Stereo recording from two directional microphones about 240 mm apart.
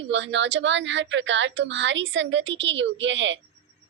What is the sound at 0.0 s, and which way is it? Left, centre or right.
A woman's voice, right.